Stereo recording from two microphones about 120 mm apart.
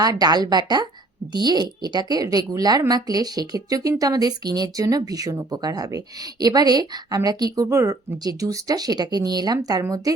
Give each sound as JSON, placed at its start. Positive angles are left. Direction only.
{"t": 0.0, "sound": "speech", "side_deg": -30}